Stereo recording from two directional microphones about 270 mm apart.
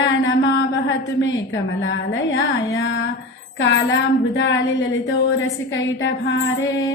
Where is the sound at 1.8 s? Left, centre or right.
Left.